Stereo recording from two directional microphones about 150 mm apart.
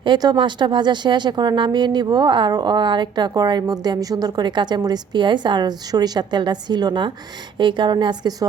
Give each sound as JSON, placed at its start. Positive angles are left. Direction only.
{"t": 0.0, "sound": "speech", "side_deg": -30}